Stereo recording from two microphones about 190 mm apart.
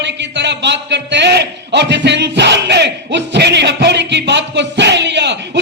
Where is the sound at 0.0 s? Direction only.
65° right (ahead or behind).